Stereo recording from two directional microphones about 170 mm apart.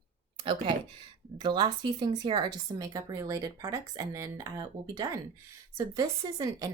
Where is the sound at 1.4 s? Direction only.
25° right (ahead or behind).